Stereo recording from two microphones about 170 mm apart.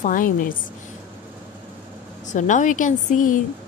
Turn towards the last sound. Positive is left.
turn(degrees=50)  # may be behind; listen again after turning